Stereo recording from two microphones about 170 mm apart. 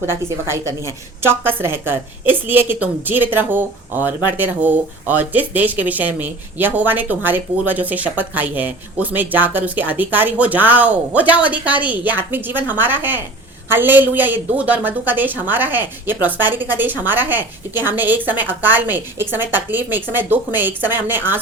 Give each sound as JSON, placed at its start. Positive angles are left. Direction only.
{"t": 0.3, "sound": "a woman's voice", "side_deg": -15}